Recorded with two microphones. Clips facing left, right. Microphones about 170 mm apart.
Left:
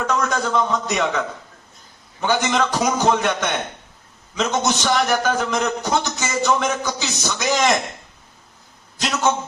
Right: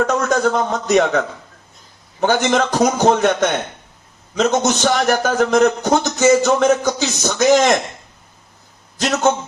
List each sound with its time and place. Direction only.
0.0 s a man's voice: 50° right (ahead or behind)
2.2 s a man's voice: 50° right (ahead or behind)
9.0 s a man's voice: 50° right (ahead or behind)